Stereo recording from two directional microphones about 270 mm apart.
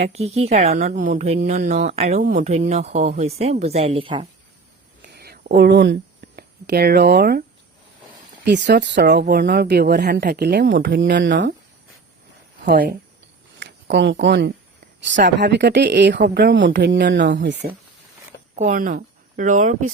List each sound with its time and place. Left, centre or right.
0.0 s speech: right
5.0 s a sound: right
8.4 s speech: right
12.6 s speech: right